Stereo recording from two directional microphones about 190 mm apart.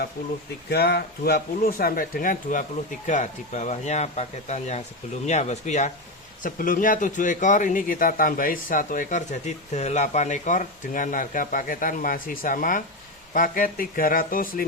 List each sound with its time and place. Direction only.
0.7 s speech: 55° left (ahead or behind)